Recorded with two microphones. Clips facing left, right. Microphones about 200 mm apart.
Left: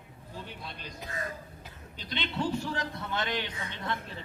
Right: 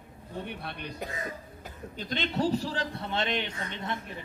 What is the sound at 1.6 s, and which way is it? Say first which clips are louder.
A man's voice: right 7 dB; 45° right (ahead or behind).